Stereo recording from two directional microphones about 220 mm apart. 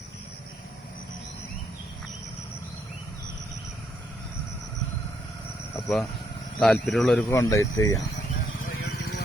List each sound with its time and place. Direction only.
5.7 s speech: centre (ahead or behind)
7.3 s speech: 15° left (ahead or behind)
8.8 s vehicle: 45° left (ahead or behind)